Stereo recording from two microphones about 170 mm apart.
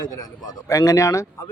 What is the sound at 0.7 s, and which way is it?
Speech, 20° left (ahead or behind).